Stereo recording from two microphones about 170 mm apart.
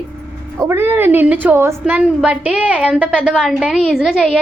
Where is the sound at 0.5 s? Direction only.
15° right (ahead or behind).